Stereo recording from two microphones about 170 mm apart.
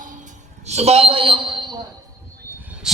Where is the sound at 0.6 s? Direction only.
40° right (ahead or behind).